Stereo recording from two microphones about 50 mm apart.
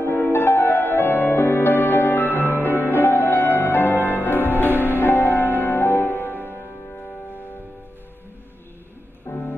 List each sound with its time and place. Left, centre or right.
0.0 s music: left
9.3 s music: left